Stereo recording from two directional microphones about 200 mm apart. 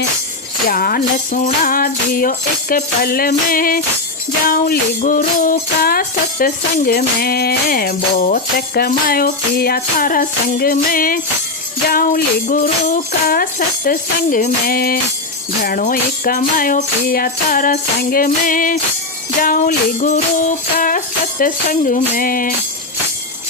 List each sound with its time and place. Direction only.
0.7 s music: 45° left (ahead or behind)